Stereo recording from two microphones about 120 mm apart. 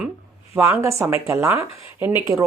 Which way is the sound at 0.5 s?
25° right (ahead or behind).